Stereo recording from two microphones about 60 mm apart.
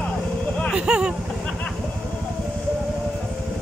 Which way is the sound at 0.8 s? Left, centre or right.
Centre.